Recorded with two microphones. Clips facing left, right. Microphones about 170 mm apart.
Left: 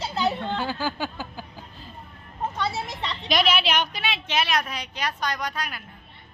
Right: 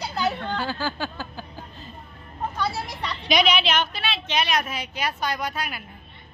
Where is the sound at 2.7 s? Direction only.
20° left (ahead or behind).